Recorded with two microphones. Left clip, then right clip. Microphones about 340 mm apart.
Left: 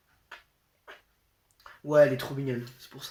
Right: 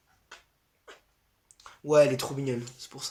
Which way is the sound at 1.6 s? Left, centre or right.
Centre.